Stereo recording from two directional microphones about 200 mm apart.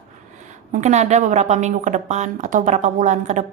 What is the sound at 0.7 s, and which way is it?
Speech, 35° right (ahead or behind).